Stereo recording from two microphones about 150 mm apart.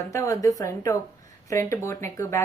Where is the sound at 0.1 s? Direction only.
20° left (ahead or behind).